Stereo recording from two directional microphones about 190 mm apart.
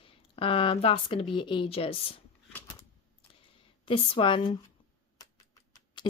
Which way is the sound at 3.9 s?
30° left (ahead or behind).